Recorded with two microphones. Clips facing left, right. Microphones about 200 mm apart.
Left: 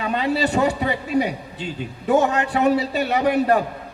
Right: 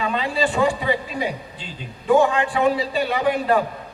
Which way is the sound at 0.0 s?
45° left (ahead or behind).